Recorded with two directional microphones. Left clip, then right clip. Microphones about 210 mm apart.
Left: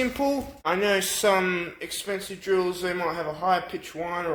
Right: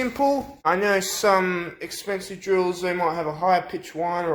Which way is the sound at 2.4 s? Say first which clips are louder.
Right 3 dB; 15° right (ahead or behind).